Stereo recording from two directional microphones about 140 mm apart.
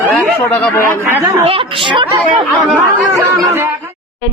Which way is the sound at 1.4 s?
40° right (ahead or behind).